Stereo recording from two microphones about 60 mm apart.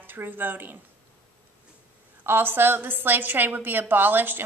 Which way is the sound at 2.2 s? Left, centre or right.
Right.